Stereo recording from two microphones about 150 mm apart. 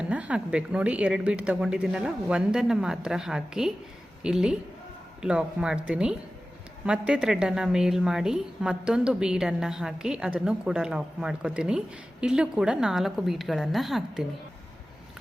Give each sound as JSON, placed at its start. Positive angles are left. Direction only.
{"t": 0.0, "sound": "a woman's voice", "side_deg": -10}